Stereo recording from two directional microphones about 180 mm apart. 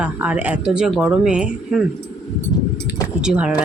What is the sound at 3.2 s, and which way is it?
Speech, 5° right (ahead or behind).